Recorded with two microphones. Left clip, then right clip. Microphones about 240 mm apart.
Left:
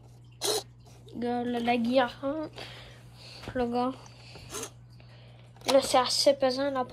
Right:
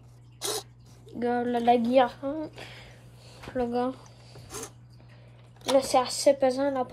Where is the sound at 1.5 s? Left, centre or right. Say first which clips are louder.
Right 5 dB; centre.